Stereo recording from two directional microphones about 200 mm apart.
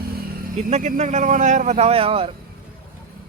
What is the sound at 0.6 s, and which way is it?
A man's voice, 35° right (ahead or behind).